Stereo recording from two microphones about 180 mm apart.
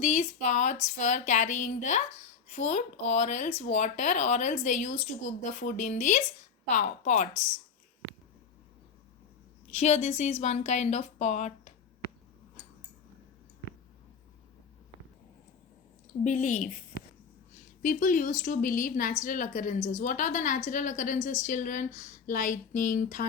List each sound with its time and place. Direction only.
0.0 s speech: 40° left (ahead or behind)
9.6 s a woman's voice: 40° left (ahead or behind)
16.2 s speech: 45° left (ahead or behind)
16.9 s a sound: 65° left (ahead or behind)
17.8 s speech: 45° left (ahead or behind)